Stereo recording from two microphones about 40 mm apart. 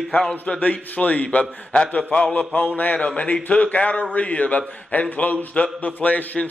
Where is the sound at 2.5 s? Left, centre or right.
Left.